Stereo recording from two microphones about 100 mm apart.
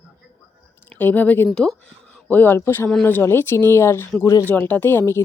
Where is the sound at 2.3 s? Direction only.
20° left (ahead or behind).